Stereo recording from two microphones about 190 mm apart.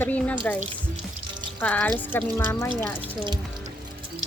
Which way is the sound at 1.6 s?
5° left (ahead or behind).